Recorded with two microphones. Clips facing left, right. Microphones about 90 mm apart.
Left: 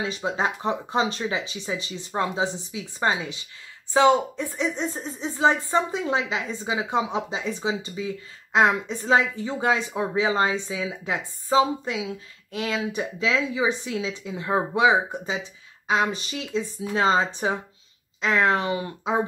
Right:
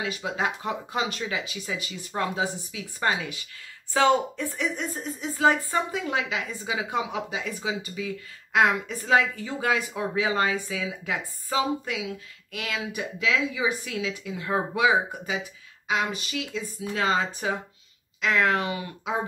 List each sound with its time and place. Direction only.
0.0 s speech: 30° left (ahead or behind)